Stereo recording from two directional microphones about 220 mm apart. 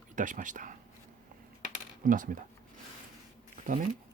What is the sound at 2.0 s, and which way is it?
Speech, 35° right (ahead or behind).